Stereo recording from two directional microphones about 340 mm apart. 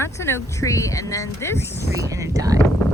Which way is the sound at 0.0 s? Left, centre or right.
Centre.